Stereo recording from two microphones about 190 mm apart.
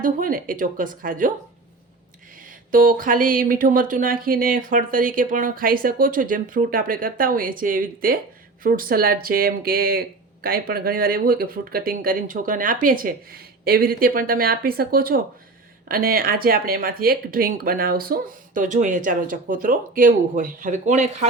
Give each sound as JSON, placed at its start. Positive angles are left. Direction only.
{"t": 0.0, "sound": "speech", "side_deg": -45}
{"t": 2.4, "sound": "speech", "side_deg": -45}